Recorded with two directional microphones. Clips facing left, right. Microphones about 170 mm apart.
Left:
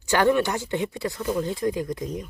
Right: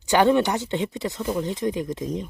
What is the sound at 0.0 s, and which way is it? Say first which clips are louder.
Speech: right 2 dB; 20° right (ahead or behind).